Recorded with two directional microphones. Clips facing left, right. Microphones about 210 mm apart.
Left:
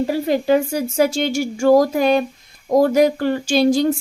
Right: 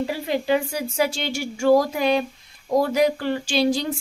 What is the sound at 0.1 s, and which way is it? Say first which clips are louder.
A woman's voice: left 6 dB; 45° left (ahead or behind).